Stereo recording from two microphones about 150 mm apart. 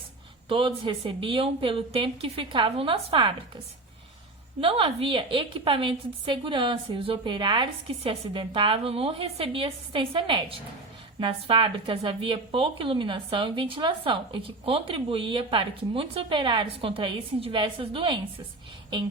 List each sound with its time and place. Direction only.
0.4 s a woman's voice: 35° right (ahead or behind)
4.6 s a woman's voice: 35° right (ahead or behind)